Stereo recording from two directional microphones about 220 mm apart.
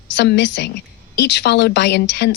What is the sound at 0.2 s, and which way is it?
A woman's voice, 50° left (ahead or behind).